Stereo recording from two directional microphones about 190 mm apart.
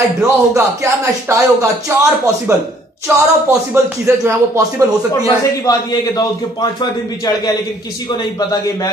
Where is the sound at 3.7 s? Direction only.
15° right (ahead or behind).